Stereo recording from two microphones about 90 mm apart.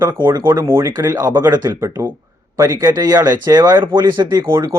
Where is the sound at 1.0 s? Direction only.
45° right (ahead or behind).